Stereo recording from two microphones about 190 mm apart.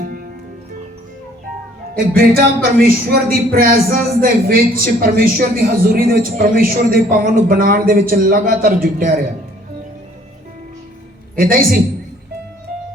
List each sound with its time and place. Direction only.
2.1 s a man's voice: 50° right (ahead or behind)
11.3 s a man's voice: 50° right (ahead or behind)